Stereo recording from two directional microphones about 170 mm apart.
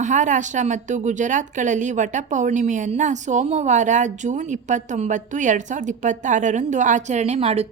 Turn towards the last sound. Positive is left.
turn(degrees=-35)  # may be behind; listen again after turning